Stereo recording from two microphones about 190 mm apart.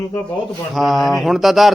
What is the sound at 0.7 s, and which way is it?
A man's voice, centre (ahead or behind).